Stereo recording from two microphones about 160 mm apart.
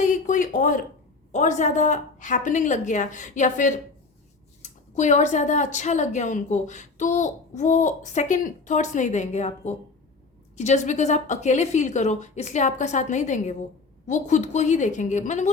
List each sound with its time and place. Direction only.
0.0 s a woman's voice: 55° left (ahead or behind)